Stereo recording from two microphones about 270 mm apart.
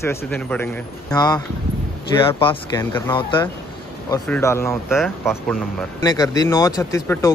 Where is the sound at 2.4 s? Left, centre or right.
Centre.